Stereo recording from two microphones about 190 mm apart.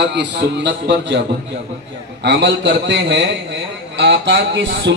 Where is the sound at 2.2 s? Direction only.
70° right (ahead or behind).